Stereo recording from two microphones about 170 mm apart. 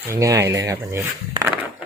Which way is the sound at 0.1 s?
20° right (ahead or behind).